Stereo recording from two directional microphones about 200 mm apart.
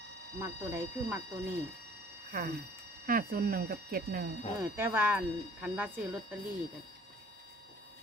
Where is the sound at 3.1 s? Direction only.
50° right (ahead or behind).